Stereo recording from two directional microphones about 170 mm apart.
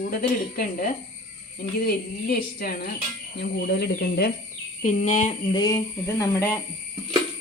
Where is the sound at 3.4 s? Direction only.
75° left (ahead or behind).